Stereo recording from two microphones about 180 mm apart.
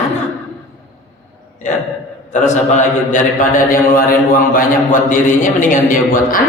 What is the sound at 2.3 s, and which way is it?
A man's voice, 40° left (ahead or behind).